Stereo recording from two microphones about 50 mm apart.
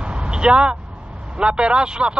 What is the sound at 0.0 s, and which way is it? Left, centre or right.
Vehicle, right.